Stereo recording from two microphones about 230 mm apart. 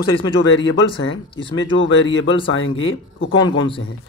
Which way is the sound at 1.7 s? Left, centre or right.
Left.